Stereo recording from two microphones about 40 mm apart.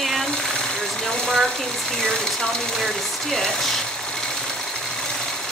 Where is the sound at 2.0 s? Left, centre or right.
Centre.